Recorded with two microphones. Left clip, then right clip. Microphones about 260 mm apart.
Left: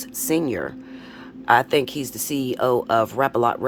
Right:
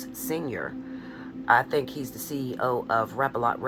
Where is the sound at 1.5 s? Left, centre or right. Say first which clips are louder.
Left 5 dB; left.